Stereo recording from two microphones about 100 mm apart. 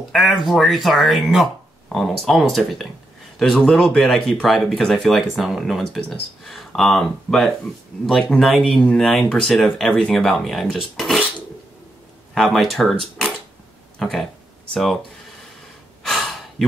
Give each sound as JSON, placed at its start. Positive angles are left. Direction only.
{"t": 0.1, "sound": "speech", "side_deg": 0}
{"t": 12.4, "sound": "speech", "side_deg": 0}
{"t": 13.9, "sound": "speech", "side_deg": 5}
{"t": 16.0, "sound": "gasp", "side_deg": 0}